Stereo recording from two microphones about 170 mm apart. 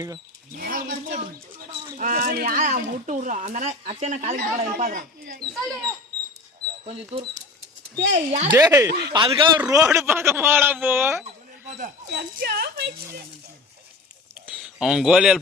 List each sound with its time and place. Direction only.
0.5 s a sound: 55° right (ahead or behind)
2.0 s speech: 50° right (ahead or behind)
6.8 s speech: 35° right (ahead or behind)
8.4 s speech: 20° right (ahead or behind)
8.9 s speech: 75° right (ahead or behind)
9.1 s a man's voice: 30° right (ahead or behind); by 11.3 s 15° right (ahead or behind)
11.3 s a sound: 40° right (ahead or behind)
12.1 s speech: 60° right (ahead or behind)
14.3 s a sound: 5° right (ahead or behind)